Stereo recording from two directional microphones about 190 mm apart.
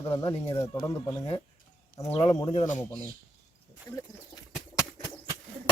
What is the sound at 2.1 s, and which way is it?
Speech, 30° left (ahead or behind).